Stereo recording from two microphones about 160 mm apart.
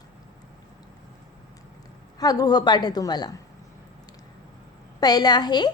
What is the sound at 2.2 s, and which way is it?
A woman's voice, 25° left (ahead or behind).